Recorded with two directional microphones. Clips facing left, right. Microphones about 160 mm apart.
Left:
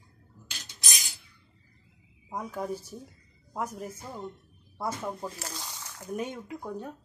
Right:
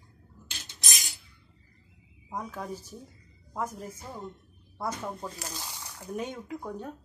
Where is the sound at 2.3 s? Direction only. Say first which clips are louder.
Left 3 dB; 10° left (ahead or behind).